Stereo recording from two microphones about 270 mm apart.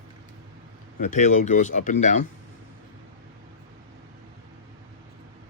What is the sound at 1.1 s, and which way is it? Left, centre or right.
Speech, left.